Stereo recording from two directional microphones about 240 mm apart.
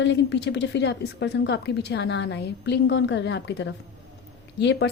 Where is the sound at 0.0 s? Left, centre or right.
Left.